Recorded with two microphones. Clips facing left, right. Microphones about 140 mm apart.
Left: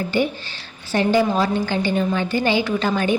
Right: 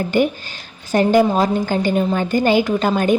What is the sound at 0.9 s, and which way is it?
A woman's voice, 40° right (ahead or behind).